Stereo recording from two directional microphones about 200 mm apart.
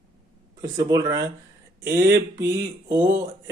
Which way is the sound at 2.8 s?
15° right (ahead or behind).